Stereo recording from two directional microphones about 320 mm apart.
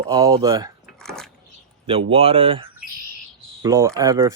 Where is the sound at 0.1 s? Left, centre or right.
Centre.